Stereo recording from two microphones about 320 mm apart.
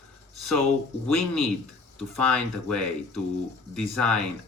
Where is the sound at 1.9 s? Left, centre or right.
Centre.